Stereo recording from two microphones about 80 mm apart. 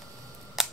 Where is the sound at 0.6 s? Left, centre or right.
Centre.